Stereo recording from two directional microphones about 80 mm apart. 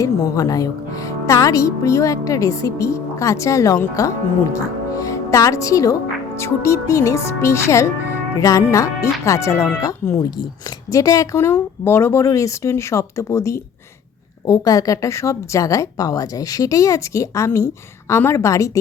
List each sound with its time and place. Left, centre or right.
0.0 s a woman's voice: left
14.4 s a woman's voice: left